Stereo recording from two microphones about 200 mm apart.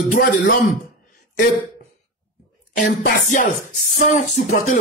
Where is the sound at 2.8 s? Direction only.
40° left (ahead or behind).